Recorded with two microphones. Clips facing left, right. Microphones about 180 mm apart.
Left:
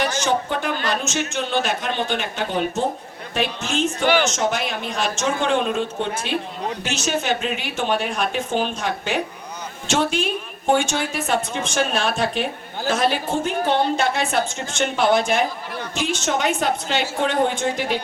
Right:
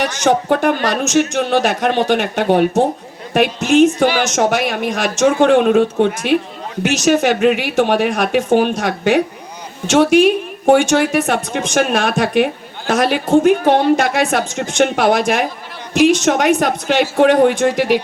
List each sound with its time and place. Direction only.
0.0 s speech: 65° right (ahead or behind)